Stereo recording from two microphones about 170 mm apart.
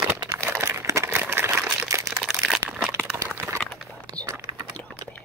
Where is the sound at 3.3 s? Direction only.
15° right (ahead or behind).